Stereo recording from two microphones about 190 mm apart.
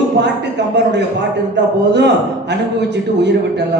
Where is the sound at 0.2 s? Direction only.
65° right (ahead or behind).